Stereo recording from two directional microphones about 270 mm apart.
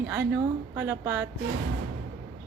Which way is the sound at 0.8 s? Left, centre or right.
Centre.